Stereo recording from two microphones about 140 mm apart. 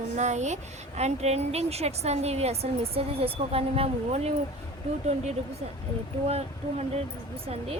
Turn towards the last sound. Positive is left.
turn(degrees=-45)  # may be behind; listen again after turning